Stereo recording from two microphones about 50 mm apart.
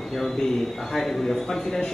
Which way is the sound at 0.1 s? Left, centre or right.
Centre.